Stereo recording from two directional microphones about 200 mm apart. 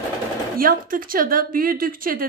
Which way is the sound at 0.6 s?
45° right (ahead or behind).